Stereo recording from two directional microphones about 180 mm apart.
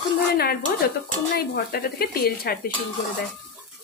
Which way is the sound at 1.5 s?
55° left (ahead or behind).